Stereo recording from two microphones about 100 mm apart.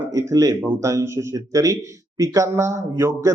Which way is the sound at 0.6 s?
25° right (ahead or behind).